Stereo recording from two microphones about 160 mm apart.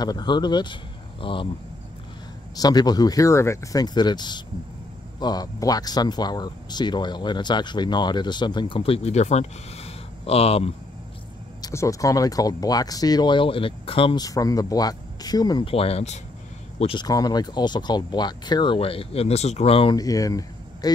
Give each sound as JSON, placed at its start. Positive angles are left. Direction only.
{"t": 0.0, "sound": "speech", "side_deg": 25}
{"t": 2.5, "sound": "speech", "side_deg": 25}
{"t": 11.6, "sound": "speech", "side_deg": 20}
{"t": 14.2, "sound": "a man's voice", "side_deg": 20}
{"t": 17.0, "sound": "speech", "side_deg": 25}
{"t": 20.0, "sound": "speech", "side_deg": 20}